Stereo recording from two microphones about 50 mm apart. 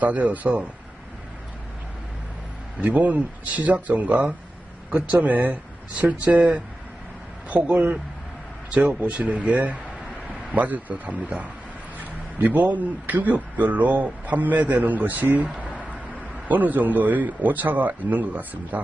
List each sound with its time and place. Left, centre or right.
0.0 s speech: right
2.8 s a man's voice: right